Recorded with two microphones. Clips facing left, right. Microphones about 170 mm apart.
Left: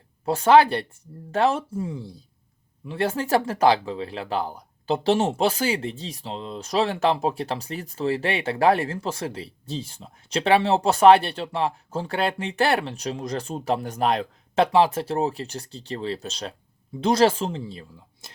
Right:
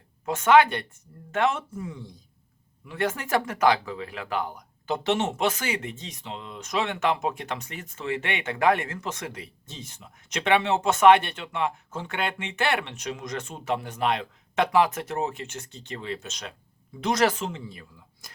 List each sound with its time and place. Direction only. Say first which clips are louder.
0.3 s speech: left 3 dB; 35° left (ahead or behind)